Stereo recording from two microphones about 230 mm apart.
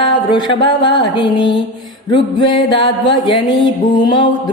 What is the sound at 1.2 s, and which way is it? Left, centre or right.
Music, left.